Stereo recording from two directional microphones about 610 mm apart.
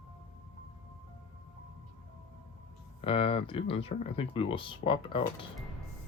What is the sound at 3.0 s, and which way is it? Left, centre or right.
Speech, centre.